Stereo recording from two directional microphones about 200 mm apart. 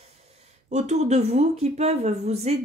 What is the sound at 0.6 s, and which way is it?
Speech, 35° right (ahead or behind).